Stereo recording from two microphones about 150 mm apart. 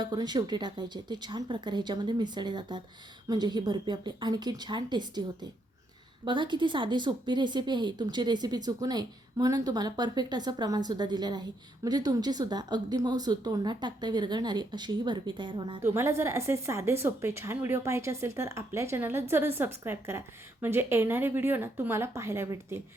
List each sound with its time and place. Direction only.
0.0 s speech: 30° right (ahead or behind)
15.8 s a woman's voice: 15° right (ahead or behind)